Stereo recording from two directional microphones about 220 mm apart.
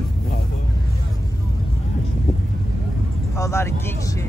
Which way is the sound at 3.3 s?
15° left (ahead or behind).